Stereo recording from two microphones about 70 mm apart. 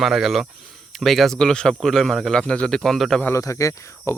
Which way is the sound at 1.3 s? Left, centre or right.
Centre.